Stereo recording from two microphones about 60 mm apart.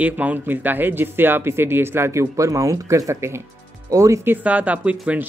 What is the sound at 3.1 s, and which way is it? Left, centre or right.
Speech, right.